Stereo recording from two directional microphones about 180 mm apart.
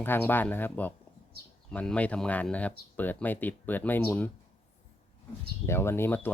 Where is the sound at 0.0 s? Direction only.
10° left (ahead or behind).